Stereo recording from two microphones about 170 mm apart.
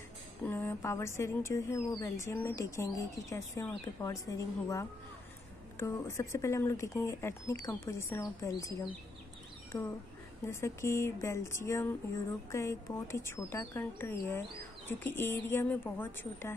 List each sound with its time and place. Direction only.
0.5 s speech: 15° left (ahead or behind)
9.7 s speech: 15° left (ahead or behind)